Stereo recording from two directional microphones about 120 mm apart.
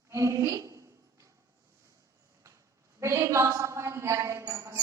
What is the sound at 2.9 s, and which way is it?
A woman's voice, 25° right (ahead or behind).